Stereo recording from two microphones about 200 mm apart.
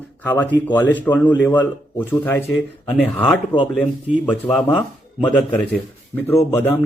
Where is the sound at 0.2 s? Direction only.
10° left (ahead or behind).